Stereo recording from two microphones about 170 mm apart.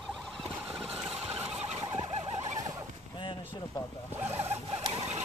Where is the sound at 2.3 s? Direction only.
25° right (ahead or behind).